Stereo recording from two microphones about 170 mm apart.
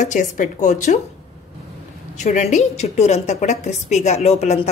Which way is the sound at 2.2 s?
45° left (ahead or behind).